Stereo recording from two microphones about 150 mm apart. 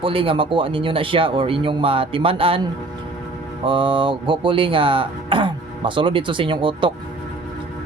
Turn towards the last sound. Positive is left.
turn(degrees=-35)  # may be behind; listen again after turning